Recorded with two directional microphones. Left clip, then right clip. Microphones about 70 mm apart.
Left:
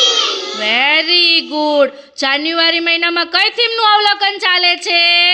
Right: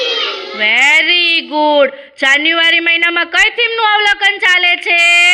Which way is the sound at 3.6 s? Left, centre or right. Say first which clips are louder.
Even; left.